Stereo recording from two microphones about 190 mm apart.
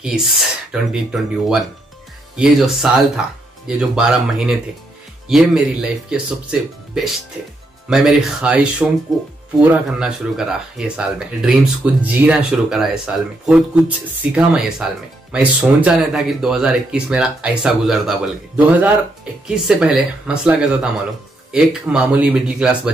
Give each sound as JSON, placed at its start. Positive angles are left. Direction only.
{"t": 0.0, "sound": "speech", "side_deg": 0}